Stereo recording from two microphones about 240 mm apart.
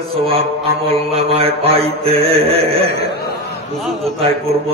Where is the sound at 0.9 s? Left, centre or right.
Right.